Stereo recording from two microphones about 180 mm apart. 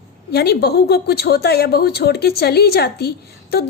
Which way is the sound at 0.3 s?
65° left (ahead or behind).